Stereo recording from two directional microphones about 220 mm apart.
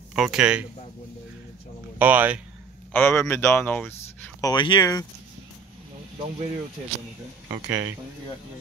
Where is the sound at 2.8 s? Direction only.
10° left (ahead or behind).